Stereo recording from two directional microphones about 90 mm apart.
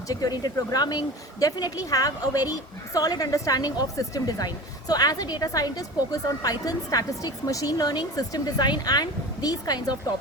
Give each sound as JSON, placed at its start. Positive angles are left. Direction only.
{"t": 0.1, "sound": "speech", "side_deg": 45}